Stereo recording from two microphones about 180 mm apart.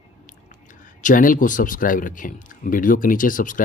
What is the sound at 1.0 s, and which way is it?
Speech, 50° left (ahead or behind).